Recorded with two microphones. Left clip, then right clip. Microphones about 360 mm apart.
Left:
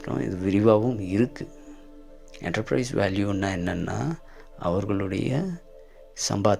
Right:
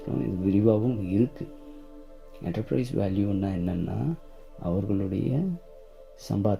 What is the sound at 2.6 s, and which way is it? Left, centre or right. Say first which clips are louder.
Speech: left 2 dB; centre.